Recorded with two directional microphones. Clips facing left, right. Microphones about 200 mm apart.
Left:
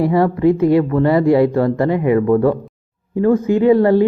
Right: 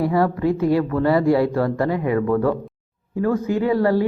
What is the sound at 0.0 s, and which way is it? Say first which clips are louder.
Speech: left 5 dB; 25° left (ahead or behind).